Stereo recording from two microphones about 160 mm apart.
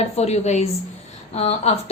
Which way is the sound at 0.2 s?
45° left (ahead or behind).